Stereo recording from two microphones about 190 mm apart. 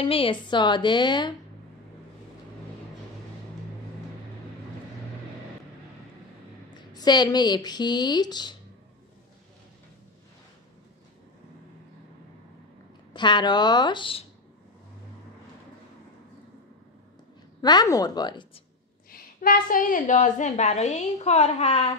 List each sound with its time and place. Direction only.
0.0 s a woman's voice: 30° left (ahead or behind)
6.7 s a woman's voice: 20° left (ahead or behind)
13.1 s a woman's voice: 25° left (ahead or behind)
17.6 s a woman's voice: 20° left (ahead or behind)
19.0 s a woman's voice: 50° left (ahead or behind); by 21.9 s 30° left (ahead or behind)